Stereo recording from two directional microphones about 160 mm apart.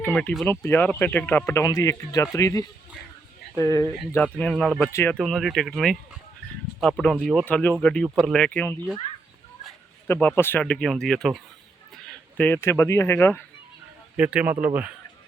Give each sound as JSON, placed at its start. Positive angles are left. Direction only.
{"t": 0.0, "sound": "speech", "side_deg": 10}
{"t": 4.2, "sound": "speech", "side_deg": 5}
{"t": 4.9, "sound": "speech", "side_deg": 20}
{"t": 5.1, "sound": "speech", "side_deg": 5}
{"t": 10.1, "sound": "speech", "side_deg": 10}
{"t": 14.2, "sound": "speech", "side_deg": -10}